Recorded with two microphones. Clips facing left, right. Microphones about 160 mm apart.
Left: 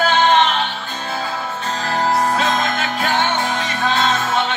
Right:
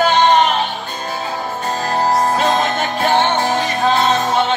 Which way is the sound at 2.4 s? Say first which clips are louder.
Right 3 dB; 35° right (ahead or behind).